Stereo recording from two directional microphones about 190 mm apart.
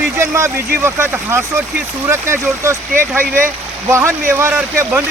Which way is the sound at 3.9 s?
15° right (ahead or behind).